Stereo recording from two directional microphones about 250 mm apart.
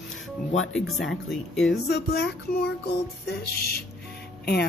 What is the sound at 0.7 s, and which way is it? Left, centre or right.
Speech, centre.